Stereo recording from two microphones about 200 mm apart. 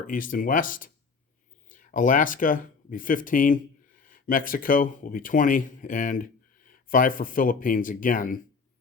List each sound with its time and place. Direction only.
0.1 s speech: 40° left (ahead or behind)